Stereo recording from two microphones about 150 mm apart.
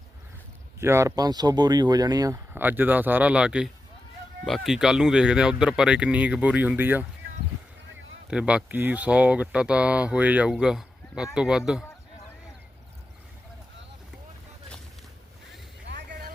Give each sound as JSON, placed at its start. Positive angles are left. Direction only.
{"t": 0.8, "sound": "speech", "side_deg": -20}
{"t": 8.3, "sound": "speech", "side_deg": -5}